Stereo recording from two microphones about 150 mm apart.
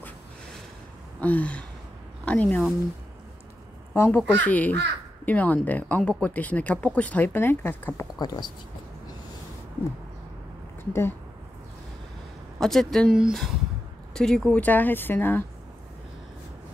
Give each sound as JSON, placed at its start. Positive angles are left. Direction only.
{"t": 1.2, "sound": "speech", "side_deg": 10}
{"t": 3.9, "sound": "speech", "side_deg": 15}
{"t": 8.2, "sound": "speech", "side_deg": 25}
{"t": 10.9, "sound": "speech", "side_deg": 15}
{"t": 12.5, "sound": "speech", "side_deg": 0}